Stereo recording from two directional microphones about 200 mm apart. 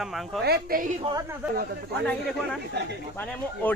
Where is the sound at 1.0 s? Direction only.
30° right (ahead or behind).